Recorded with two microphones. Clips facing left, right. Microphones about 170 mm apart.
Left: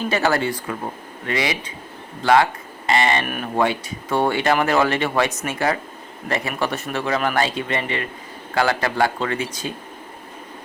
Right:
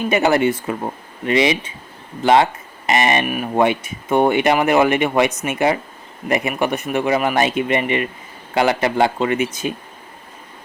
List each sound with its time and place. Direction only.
0.1 s speech: 20° right (ahead or behind)
2.2 s a sound: 20° right (ahead or behind)
3.2 s speech: 5° right (ahead or behind)
3.5 s speech: 20° right (ahead or behind)